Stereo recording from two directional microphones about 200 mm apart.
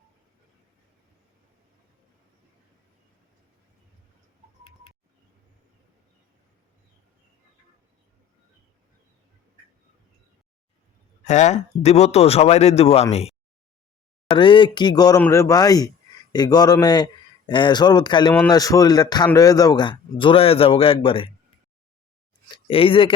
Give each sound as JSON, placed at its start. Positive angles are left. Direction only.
{"t": 11.2, "sound": "speech", "side_deg": 35}
{"t": 22.5, "sound": "speech", "side_deg": 25}